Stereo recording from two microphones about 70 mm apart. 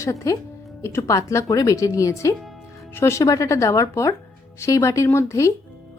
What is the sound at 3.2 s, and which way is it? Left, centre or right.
Speech, left.